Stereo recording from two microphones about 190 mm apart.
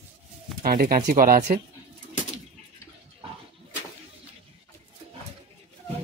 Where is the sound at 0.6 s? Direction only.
50° right (ahead or behind).